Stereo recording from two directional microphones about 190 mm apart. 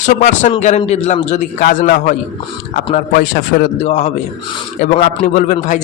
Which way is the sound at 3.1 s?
50° left (ahead or behind).